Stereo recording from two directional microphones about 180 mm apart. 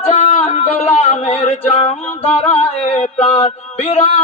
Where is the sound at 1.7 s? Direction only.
35° left (ahead or behind).